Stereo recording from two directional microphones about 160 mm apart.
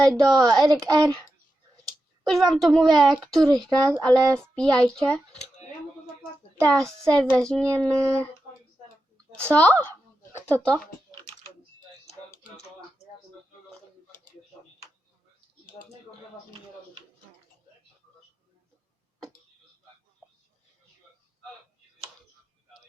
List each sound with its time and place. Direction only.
0.0 s a child's voice: 5° left (ahead or behind)
0.6 s speech: 25° right (ahead or behind)
2.3 s a child's voice: centre (ahead or behind)
3.8 s speech: 25° right (ahead or behind)
4.0 s a child's voice: 5° left (ahead or behind)
6.6 s a child's voice: 5° left (ahead or behind)
9.5 s a woman's voice: 10° left (ahead or behind)